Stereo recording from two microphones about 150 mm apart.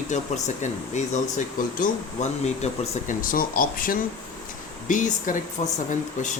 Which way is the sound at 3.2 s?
70° left (ahead or behind).